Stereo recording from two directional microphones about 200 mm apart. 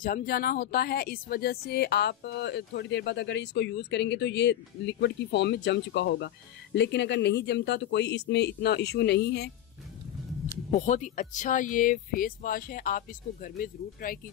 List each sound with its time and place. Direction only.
0.0 s speech: 45° left (ahead or behind)
10.7 s speech: 40° left (ahead or behind)